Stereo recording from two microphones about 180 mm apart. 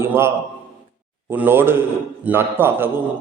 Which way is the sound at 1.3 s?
10° right (ahead or behind).